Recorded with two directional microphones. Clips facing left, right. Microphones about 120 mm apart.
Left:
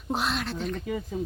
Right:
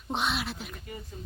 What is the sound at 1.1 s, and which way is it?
Speech, 90° left.